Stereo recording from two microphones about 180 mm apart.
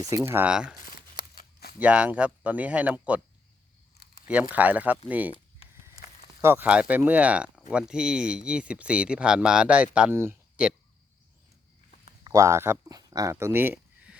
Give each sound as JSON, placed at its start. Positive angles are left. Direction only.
{"t": 0.3, "sound": "speech", "side_deg": -10}
{"t": 1.1, "sound": "scissors", "side_deg": 55}
{"t": 1.8, "sound": "speech", "side_deg": -5}
{"t": 4.5, "sound": "speech", "side_deg": -10}
{"t": 6.4, "sound": "speech", "side_deg": -10}
{"t": 12.2, "sound": "speech", "side_deg": -20}